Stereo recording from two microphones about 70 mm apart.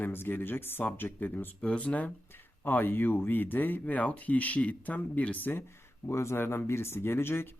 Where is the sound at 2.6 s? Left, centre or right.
Left.